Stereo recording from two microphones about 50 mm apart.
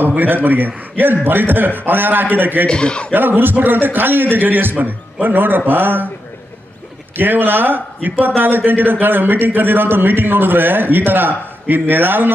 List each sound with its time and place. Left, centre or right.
0.0 s a man's voice: right
2.7 s speech: centre
3.1 s a man's voice: right
7.2 s a man's voice: right